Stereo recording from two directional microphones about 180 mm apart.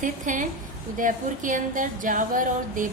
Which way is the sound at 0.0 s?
45° right (ahead or behind).